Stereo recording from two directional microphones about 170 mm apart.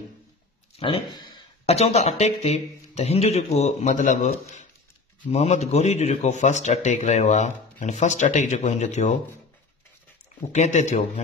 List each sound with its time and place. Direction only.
0.7 s speech: 30° left (ahead or behind)
1.7 s a man's voice: 40° left (ahead or behind)
10.5 s a man's voice: 45° left (ahead or behind)